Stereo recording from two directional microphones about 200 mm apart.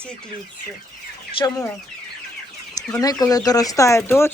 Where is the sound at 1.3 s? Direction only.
25° left (ahead or behind).